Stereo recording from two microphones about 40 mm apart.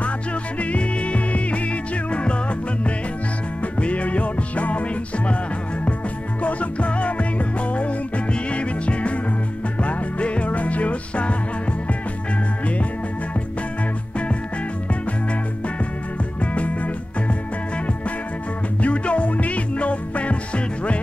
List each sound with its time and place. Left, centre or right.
0.6 s music: left
3.6 s music: left
6.4 s music: left
16.5 s music: left
18.8 s music: left